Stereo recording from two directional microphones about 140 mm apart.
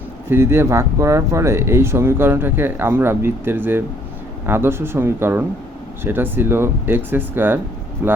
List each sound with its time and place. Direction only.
0.3 s speech: 15° right (ahead or behind)